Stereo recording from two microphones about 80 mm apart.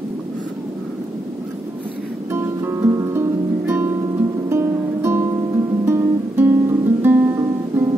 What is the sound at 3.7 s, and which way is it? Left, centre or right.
Music, centre.